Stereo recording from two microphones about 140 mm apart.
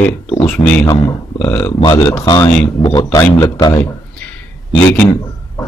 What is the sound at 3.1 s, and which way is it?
Speech, 25° left (ahead or behind).